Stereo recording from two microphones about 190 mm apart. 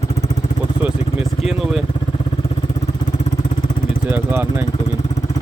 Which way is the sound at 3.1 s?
40° left (ahead or behind).